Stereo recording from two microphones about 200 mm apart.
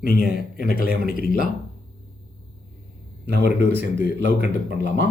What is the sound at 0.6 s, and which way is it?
Speech, 45° left (ahead or behind).